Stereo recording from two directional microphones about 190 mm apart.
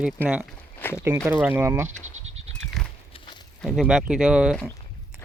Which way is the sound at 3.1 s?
25° left (ahead or behind).